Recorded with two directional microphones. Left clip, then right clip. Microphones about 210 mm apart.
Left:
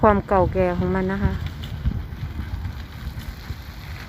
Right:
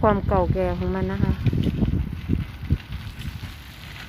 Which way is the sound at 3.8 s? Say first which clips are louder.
Right 1 dB; 25° right (ahead or behind).